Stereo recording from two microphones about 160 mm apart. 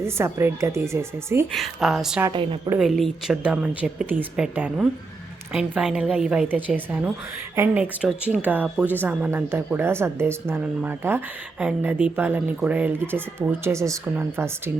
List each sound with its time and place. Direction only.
0.0 s speech: 15° right (ahead or behind)
1.5 s speech: centre (ahead or behind)
2.3 s a woman's voice: 30° right (ahead or behind)
2.7 s speech: centre (ahead or behind)